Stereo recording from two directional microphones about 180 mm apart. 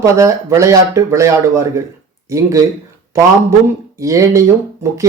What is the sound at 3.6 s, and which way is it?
Speech, 15° right (ahead or behind).